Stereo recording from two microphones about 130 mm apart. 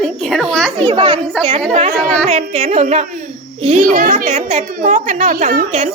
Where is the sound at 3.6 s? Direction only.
75° right (ahead or behind).